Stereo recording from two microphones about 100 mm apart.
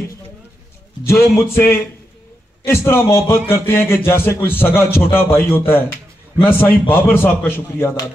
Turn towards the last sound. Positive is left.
turn(degrees=20)  # may be behind; listen again after turning